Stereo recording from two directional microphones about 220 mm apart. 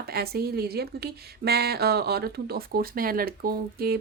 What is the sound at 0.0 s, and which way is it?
Speech, 45° right (ahead or behind).